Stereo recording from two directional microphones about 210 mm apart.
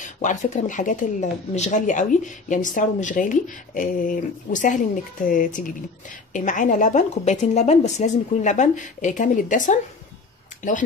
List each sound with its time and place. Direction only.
0.0 s speech: 35° left (ahead or behind)